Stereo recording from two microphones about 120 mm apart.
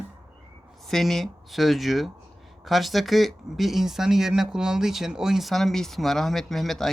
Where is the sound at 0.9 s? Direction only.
5° left (ahead or behind).